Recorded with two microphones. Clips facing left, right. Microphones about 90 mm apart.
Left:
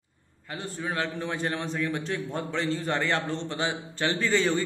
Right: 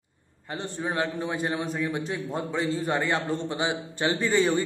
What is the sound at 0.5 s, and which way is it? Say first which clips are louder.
A man's voice: right 2 dB; 25° right (ahead or behind).